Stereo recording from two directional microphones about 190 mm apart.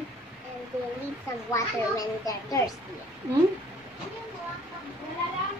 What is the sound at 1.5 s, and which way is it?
A child's voice, 20° left (ahead or behind).